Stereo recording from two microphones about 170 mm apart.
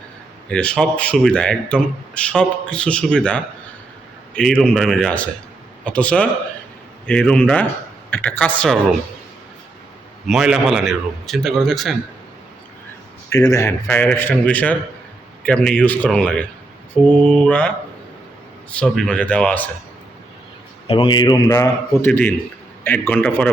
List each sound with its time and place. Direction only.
0.5 s speech: 5° left (ahead or behind)
4.6 s a man's voice: 5° left (ahead or behind)
10.2 s speech: centre (ahead or behind)
13.3 s a man's voice: 20° left (ahead or behind)
18.7 s a man's voice: 5° left (ahead or behind)
20.8 s a man's voice: 30° left (ahead or behind)
22.0 s a man's voice: 10° left (ahead or behind)